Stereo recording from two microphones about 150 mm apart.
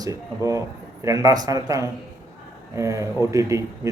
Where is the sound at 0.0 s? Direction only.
20° right (ahead or behind).